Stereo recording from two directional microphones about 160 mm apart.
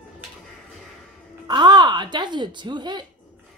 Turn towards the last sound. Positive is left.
turn(degrees=-30)  # may be behind; listen again after turning